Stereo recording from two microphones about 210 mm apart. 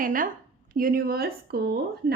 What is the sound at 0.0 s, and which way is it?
A woman's voice, 40° right (ahead or behind).